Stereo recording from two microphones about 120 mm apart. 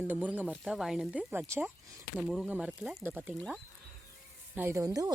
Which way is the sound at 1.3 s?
20° right (ahead or behind).